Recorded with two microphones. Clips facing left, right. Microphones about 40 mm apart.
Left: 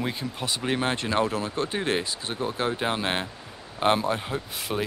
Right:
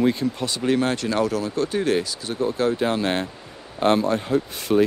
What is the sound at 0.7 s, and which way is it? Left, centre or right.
Speech, left.